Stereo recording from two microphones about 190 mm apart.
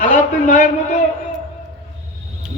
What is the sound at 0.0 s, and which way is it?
Speech, 40° left (ahead or behind).